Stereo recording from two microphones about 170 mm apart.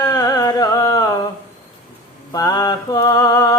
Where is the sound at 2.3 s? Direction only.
20° left (ahead or behind).